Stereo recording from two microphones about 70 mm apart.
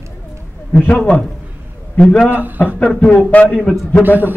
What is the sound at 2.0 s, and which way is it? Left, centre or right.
Speech, centre.